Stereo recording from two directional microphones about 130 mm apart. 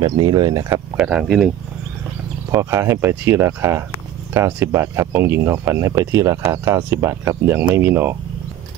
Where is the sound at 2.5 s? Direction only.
20° right (ahead or behind).